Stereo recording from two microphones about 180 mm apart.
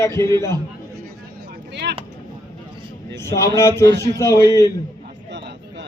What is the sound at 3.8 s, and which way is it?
Speech, 70° right (ahead or behind).